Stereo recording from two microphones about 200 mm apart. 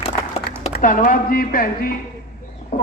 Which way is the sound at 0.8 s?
40° left (ahead or behind).